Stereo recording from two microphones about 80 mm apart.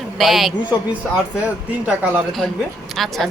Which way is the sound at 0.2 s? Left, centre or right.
Centre.